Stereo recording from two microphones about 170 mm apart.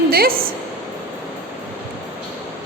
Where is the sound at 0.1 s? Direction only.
60° right (ahead or behind).